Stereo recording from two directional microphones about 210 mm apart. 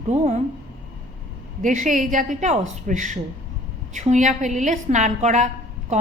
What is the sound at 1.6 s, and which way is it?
A woman's voice, 35° right (ahead or behind).